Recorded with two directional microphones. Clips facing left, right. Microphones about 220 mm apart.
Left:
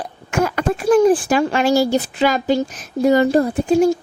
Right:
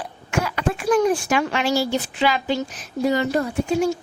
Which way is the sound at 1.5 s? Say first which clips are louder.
Left 6 dB; 45° left (ahead or behind).